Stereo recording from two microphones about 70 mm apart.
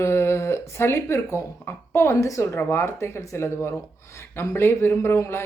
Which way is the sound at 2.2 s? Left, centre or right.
Left.